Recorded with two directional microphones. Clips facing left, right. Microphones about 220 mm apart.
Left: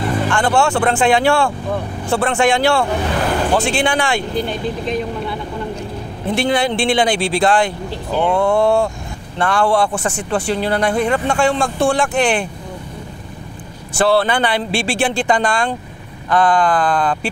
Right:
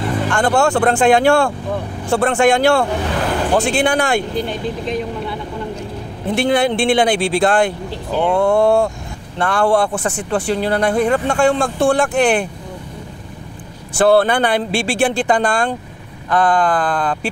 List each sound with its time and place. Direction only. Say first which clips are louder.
0.0 s a sound: left 1 dB; 5° left (ahead or behind)
0.3 s speech: right 2 dB; 40° right (ahead or behind)
3.2 s vehicle: left 1 dB; 5° left (ahead or behind)
3.6 s speech: right 1 dB; 40° right (ahead or behind)
6.4 s speech: right 2 dB; 50° right (ahead or behind)
13.9 s speech: right 3 dB; 50° right (ahead or behind)